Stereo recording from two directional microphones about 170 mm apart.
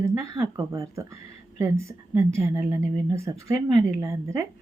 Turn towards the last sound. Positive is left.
turn(degrees=-20)  # may be behind; listen again after turning